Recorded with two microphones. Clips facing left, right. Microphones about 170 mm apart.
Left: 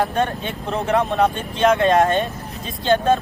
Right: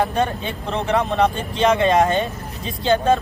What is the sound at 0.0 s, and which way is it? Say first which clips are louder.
Speech: even; centre (ahead or behind).